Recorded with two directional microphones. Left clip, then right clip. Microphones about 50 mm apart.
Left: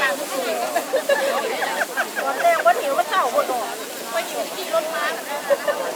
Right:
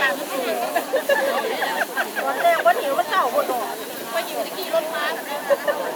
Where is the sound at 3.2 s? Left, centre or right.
Right.